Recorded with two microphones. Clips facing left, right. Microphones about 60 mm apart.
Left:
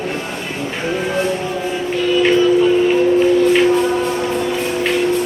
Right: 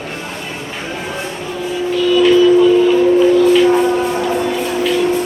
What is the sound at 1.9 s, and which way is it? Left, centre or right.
Music, left.